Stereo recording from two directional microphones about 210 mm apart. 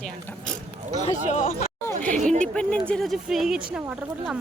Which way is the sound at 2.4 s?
5° left (ahead or behind).